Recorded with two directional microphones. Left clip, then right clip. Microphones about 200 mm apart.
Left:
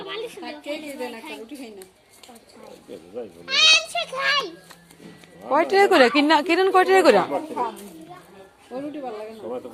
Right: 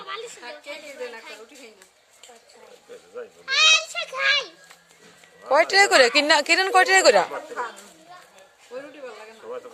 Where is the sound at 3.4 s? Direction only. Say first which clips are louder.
Left 1 dB; 10° right (ahead or behind).